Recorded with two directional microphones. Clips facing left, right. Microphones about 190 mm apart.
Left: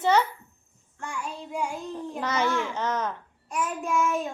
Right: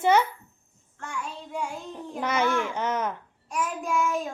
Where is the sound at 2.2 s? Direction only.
10° right (ahead or behind).